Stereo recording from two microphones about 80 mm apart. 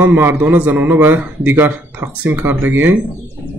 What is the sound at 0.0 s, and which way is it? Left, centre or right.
A man's voice, right.